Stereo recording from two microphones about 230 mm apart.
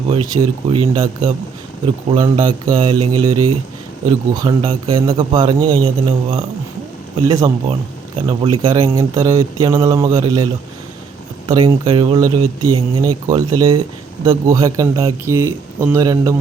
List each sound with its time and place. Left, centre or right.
0.1 s a man's voice: centre
3.1 s speech: right
4.4 s a man's voice: centre
11.4 s a man's voice: centre